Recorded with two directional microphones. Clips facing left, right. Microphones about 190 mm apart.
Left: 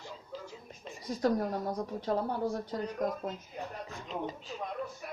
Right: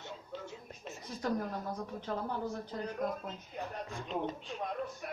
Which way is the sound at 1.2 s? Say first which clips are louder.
Left 5 dB; 35° left (ahead or behind).